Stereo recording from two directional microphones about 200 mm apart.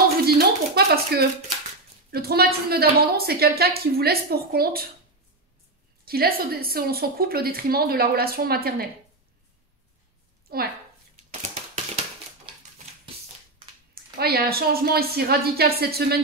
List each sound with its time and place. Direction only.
0.2 s a sound: 50° right (ahead or behind)
2.0 s a woman's voice: 50° right (ahead or behind)
6.0 s a woman's voice: 50° right (ahead or behind)
10.5 s speech: 50° right (ahead or behind)
13.9 s a woman's voice: 50° right (ahead or behind)